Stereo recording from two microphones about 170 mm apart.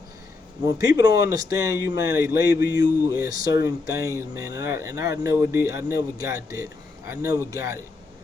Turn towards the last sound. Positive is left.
turn(degrees=-15)  # may be behind; listen again after turning